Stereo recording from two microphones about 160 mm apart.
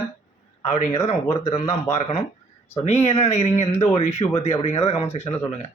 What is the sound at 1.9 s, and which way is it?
A man's voice, 40° left (ahead or behind).